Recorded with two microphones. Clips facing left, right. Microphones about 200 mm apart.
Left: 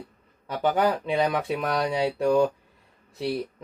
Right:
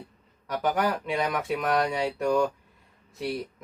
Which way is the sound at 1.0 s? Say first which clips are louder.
Left 4 dB; 30° left (ahead or behind).